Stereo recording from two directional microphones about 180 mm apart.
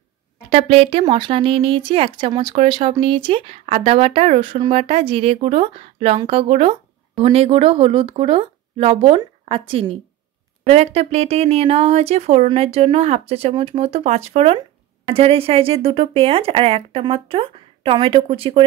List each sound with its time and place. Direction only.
0.5 s speech: 30° right (ahead or behind)